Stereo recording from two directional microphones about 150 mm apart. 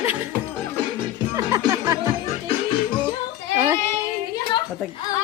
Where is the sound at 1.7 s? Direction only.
20° right (ahead or behind).